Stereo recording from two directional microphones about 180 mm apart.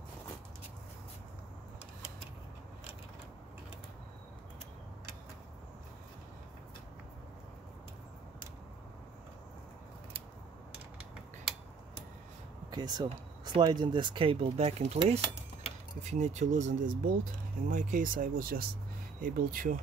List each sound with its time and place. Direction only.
12.7 s speech: 20° right (ahead or behind); by 19.7 s 50° right (ahead or behind)